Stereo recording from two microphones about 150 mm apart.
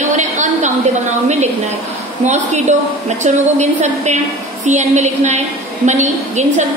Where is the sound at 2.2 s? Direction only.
50° right (ahead or behind).